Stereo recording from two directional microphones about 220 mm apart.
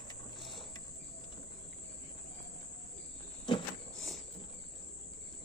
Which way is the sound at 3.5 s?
20° left (ahead or behind).